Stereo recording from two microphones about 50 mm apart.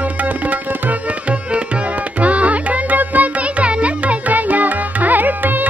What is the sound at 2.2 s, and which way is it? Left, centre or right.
Music, right.